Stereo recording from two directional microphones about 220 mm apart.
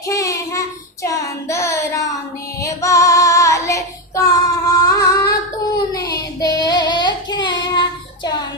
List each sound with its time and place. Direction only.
0.1 s child singing: 15° left (ahead or behind)